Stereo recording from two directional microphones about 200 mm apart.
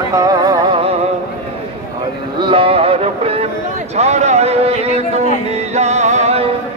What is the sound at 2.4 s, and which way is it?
Music, 25° right (ahead or behind).